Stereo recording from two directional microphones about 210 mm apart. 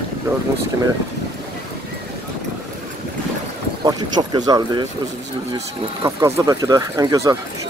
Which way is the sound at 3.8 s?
20° right (ahead or behind).